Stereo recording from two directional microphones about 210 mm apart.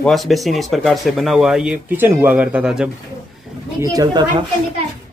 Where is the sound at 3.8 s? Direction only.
15° right (ahead or behind).